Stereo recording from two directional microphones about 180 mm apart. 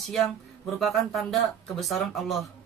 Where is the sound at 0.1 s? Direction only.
Centre (ahead or behind).